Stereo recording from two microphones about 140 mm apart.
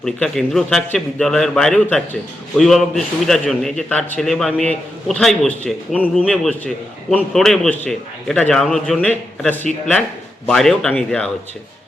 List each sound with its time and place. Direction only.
0.0 s a man's voice: 5° left (ahead or behind)